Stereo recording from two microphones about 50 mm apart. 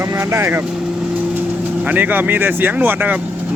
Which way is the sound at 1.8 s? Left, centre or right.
Right.